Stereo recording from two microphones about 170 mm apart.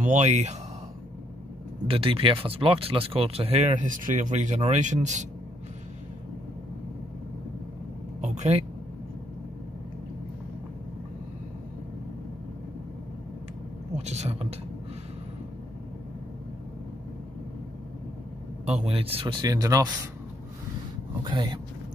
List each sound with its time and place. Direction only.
0.0 s speech: 45° right (ahead or behind)
1.9 s speech: 35° right (ahead or behind)
8.2 s vehicle: 40° right (ahead or behind)
13.9 s speech: 40° right (ahead or behind)
18.9 s speech: 35° right (ahead or behind)
21.2 s speech: 30° right (ahead or behind)